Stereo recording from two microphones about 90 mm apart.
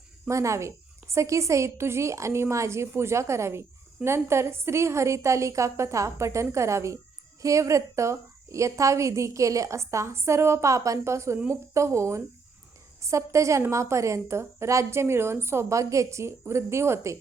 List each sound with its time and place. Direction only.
0.3 s a woman's voice: 35° right (ahead or behind)